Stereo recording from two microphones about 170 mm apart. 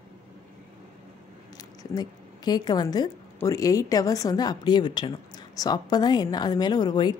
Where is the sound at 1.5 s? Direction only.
20° left (ahead or behind).